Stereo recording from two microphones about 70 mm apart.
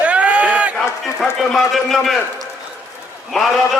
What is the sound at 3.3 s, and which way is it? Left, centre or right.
Speech, centre.